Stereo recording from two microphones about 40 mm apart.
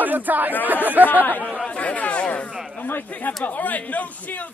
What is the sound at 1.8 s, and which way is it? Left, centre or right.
Speech, left.